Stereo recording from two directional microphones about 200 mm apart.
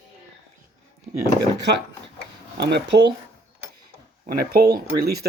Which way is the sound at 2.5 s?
55° right (ahead or behind).